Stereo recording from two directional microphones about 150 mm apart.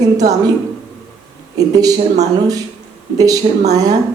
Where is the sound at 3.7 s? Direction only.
25° right (ahead or behind).